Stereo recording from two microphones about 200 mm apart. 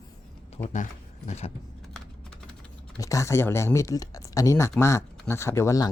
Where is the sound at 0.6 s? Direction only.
30° left (ahead or behind).